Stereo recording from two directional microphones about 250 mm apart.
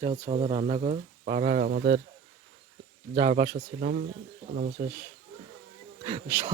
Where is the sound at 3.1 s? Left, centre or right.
Right.